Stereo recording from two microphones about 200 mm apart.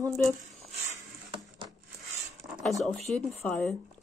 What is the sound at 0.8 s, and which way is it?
Patter, 30° right (ahead or behind).